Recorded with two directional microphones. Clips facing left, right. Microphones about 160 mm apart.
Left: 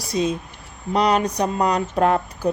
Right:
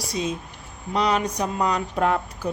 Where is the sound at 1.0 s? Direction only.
35° left (ahead or behind).